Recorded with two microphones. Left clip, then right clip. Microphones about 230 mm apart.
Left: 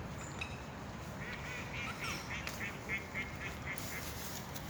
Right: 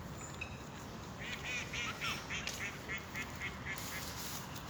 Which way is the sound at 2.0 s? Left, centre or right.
Right.